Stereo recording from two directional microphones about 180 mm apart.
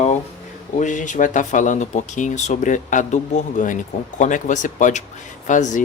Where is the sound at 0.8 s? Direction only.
45° left (ahead or behind).